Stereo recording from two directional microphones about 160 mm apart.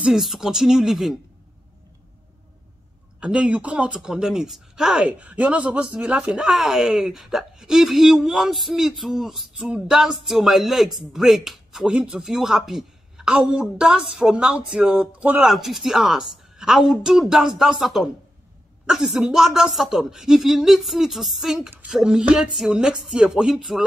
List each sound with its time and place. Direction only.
0.0 s speech: centre (ahead or behind)
3.2 s speech: 5° right (ahead or behind)